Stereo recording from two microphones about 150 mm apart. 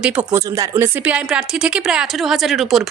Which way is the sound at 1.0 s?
5° right (ahead or behind).